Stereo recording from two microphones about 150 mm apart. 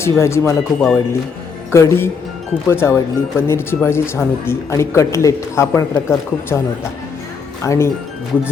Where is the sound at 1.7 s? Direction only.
20° left (ahead or behind).